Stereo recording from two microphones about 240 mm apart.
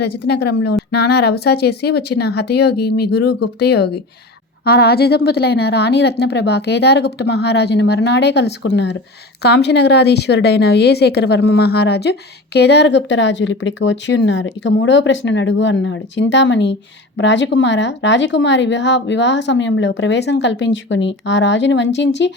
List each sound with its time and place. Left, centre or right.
0.3 s speech: left